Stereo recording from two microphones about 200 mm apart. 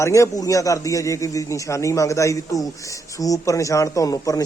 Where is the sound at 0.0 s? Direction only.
15° left (ahead or behind).